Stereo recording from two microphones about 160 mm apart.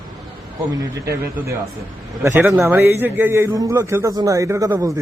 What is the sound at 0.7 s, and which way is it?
A man's voice, 20° right (ahead or behind).